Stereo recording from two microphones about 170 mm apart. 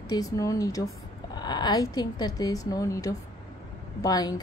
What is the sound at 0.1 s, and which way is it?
Speech, 20° left (ahead or behind).